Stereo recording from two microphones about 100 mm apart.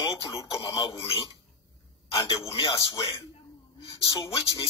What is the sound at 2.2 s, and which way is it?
Speech, 65° left (ahead or behind).